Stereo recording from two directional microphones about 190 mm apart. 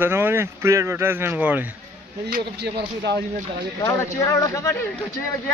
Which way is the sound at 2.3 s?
60° right (ahead or behind).